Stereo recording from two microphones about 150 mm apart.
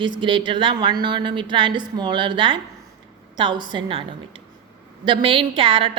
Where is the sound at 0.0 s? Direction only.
35° right (ahead or behind).